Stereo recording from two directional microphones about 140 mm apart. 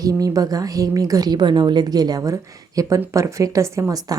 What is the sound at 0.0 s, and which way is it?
Speech, 25° right (ahead or behind).